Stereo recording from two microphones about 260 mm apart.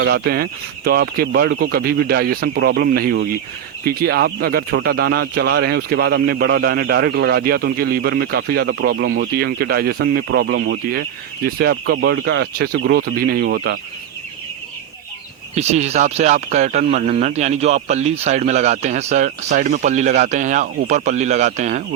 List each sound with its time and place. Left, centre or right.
0.0 s speech: right
15.5 s speech: right